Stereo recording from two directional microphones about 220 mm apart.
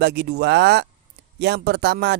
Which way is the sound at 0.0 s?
50° right (ahead or behind).